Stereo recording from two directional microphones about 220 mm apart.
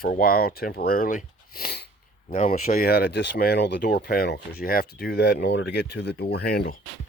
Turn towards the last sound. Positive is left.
turn(degrees=45)  # may be behind; listen again after turning